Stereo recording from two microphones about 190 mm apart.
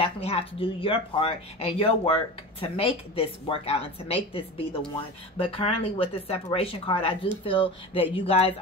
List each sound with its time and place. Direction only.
0.0 s a woman's voice: 30° left (ahead or behind)